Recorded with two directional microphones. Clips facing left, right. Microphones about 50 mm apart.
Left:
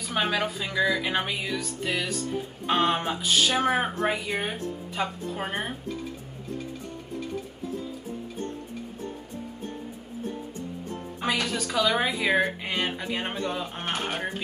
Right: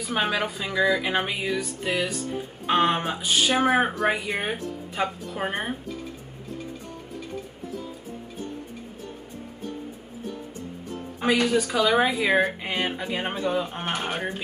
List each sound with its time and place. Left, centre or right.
0.0 s speech: centre
11.2 s speech: centre